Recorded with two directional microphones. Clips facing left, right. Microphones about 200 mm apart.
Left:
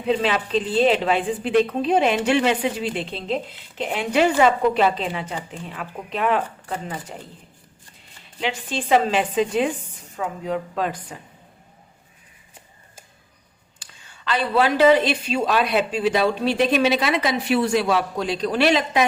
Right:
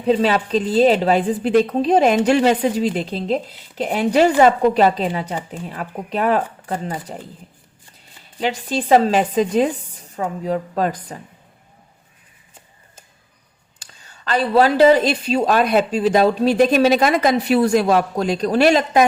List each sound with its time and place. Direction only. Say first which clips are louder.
0.0 s a woman's voice: right 5 dB; 40° right (ahead or behind)
8.4 s a woman's voice: right 5 dB; 40° right (ahead or behind)
13.7 s a woman's voice: right 2 dB; 40° right (ahead or behind)